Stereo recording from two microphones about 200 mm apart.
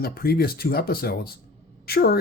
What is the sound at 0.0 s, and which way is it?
Speech, 50° left (ahead or behind).